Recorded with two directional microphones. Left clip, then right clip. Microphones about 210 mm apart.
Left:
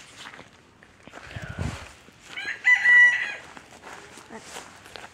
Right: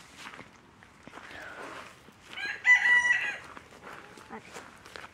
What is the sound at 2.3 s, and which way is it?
Chicken, 35° left (ahead or behind).